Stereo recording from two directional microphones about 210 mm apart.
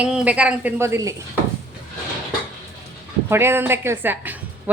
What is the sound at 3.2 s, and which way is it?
Speech, 10° right (ahead or behind).